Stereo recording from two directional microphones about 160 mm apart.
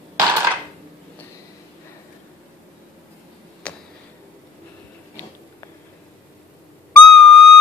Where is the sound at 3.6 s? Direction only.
5° left (ahead or behind).